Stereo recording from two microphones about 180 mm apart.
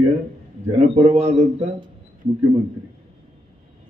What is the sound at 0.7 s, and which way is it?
A man's voice, 35° right (ahead or behind).